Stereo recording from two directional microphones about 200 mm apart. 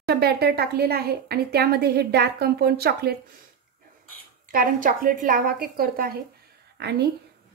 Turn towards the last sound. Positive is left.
turn(degrees=-55)  # may be behind; listen again after turning